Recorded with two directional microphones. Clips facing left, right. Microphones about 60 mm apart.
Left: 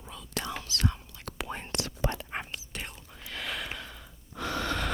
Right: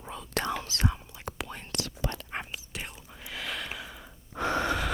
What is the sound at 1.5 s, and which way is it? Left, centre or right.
Whispering, left.